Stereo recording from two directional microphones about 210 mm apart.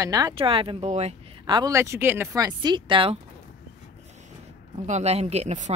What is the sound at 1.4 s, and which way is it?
Speech, 20° right (ahead or behind).